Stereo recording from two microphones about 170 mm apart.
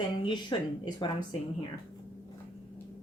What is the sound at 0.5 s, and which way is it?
Speech, 25° left (ahead or behind).